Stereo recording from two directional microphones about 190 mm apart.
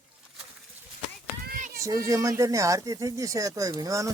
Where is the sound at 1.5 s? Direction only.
50° right (ahead or behind).